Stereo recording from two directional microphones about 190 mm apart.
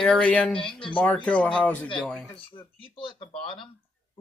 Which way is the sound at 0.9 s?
5° left (ahead or behind).